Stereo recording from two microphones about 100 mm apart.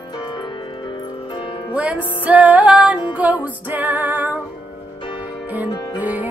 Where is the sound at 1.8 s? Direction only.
15° right (ahead or behind).